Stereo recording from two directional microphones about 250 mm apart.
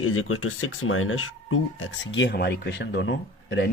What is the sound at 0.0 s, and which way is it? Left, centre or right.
Speech, left.